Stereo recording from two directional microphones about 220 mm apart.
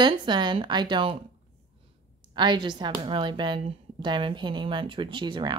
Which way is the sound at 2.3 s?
20° right (ahead or behind).